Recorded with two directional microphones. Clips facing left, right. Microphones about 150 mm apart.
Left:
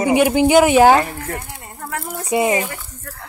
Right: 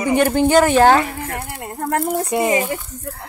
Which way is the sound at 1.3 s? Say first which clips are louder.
Right 3 dB; 65° right (ahead or behind).